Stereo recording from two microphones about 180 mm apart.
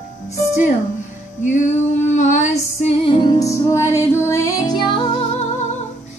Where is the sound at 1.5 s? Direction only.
45° left (ahead or behind).